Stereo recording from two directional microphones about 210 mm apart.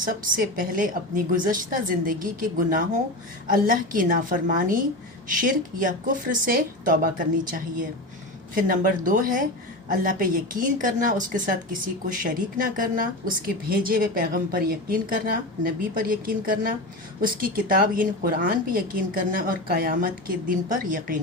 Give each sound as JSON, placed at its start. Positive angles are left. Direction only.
{"t": 0.1, "sound": "a woman's voice", "side_deg": -40}
{"t": 8.5, "sound": "a woman's voice", "side_deg": -40}